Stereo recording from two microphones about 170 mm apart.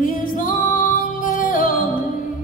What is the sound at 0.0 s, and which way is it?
Music, 55° left (ahead or behind).